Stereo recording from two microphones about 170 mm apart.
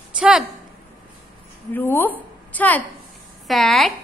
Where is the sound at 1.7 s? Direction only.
10° left (ahead or behind).